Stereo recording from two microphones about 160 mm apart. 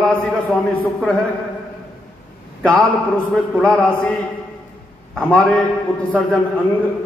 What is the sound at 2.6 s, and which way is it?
A man's voice, 5° left (ahead or behind).